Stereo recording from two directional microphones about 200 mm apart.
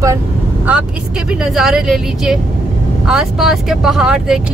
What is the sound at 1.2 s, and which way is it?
Speech, 5° right (ahead or behind).